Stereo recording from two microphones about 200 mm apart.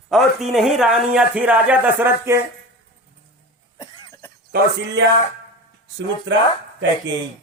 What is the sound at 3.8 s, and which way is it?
Cough, 20° left (ahead or behind).